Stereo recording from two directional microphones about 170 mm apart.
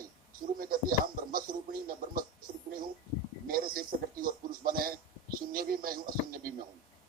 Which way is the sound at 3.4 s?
55° right (ahead or behind).